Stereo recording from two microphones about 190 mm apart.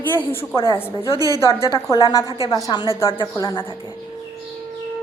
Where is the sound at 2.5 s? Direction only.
20° left (ahead or behind).